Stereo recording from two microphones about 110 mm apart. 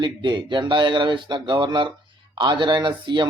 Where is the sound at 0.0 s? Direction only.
45° right (ahead or behind).